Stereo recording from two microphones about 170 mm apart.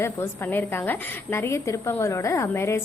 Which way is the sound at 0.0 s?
15° left (ahead or behind).